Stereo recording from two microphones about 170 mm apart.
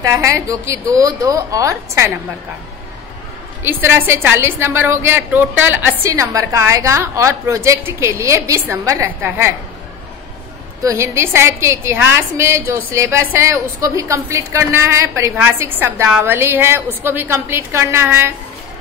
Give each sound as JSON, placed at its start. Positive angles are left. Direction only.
{"t": 0.0, "sound": "a woman's voice", "side_deg": -20}
{"t": 3.6, "sound": "a woman's voice", "side_deg": -15}
{"t": 10.8, "sound": "a woman's voice", "side_deg": -15}